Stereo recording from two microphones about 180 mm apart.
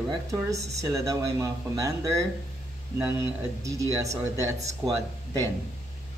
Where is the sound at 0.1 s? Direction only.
15° right (ahead or behind).